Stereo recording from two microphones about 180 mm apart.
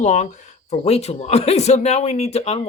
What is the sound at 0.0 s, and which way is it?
Speech, 40° left (ahead or behind).